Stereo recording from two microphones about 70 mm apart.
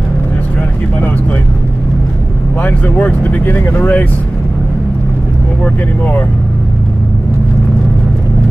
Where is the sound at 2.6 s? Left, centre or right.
Left.